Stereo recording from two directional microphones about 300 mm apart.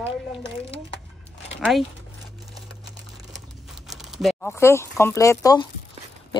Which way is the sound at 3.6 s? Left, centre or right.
Centre.